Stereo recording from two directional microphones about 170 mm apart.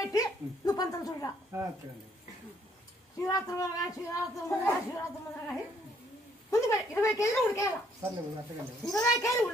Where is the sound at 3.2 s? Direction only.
20° left (ahead or behind).